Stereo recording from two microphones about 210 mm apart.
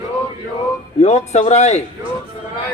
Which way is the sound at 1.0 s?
30° left (ahead or behind).